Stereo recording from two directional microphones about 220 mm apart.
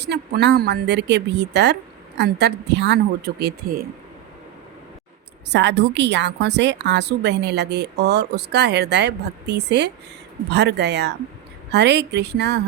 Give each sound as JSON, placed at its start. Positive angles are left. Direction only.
{"t": 0.0, "sound": "a woman's voice", "side_deg": -50}
{"t": 5.5, "sound": "a woman's voice", "side_deg": -50}